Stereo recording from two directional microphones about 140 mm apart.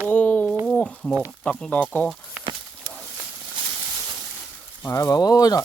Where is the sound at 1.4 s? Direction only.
5° left (ahead or behind).